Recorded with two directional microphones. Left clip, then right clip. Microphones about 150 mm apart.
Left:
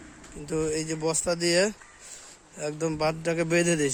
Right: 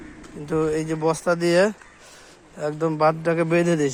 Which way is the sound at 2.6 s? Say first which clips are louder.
Right 7 dB; 25° left (ahead or behind).